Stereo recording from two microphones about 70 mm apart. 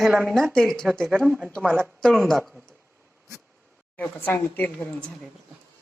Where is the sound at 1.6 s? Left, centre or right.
Right.